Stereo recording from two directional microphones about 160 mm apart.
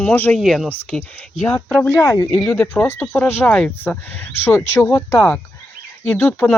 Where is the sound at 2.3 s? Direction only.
5° left (ahead or behind).